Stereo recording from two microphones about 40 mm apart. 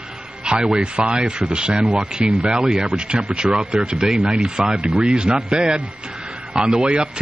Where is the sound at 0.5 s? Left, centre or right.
Right.